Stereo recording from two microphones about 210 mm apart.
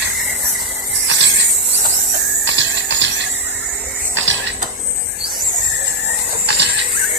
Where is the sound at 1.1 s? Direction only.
60° right (ahead or behind).